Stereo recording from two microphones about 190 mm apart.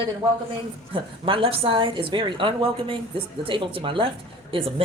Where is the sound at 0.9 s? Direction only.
30° right (ahead or behind).